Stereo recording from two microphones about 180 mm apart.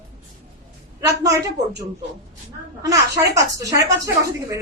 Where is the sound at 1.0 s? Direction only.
20° right (ahead or behind).